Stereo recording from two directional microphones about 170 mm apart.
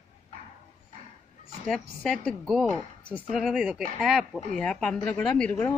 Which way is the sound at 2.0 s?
Centre (ahead or behind).